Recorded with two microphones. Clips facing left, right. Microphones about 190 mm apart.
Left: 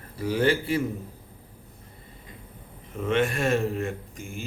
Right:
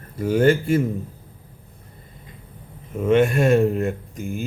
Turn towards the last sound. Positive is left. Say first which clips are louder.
# right 8 dB
turn(degrees=-45)  # may be behind; listen again after turning